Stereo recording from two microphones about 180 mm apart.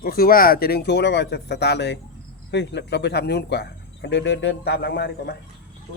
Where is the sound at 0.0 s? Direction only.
55° left (ahead or behind).